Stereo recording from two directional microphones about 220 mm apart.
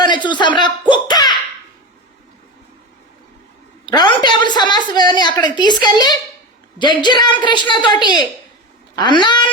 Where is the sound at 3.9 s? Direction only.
20° left (ahead or behind).